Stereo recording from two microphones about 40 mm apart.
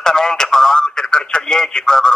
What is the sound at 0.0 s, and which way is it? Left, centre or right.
Radio, centre.